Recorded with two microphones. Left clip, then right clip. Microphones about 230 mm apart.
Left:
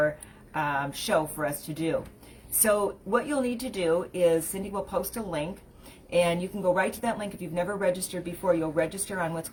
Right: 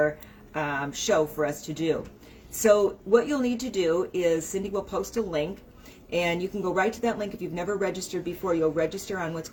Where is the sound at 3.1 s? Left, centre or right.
Centre.